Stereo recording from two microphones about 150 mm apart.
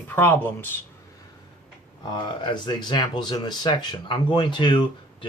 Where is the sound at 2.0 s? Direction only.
30° left (ahead or behind).